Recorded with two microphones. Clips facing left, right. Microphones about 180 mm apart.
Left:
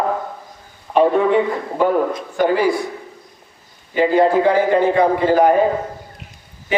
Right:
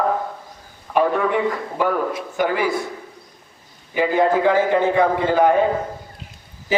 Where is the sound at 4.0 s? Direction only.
15° left (ahead or behind).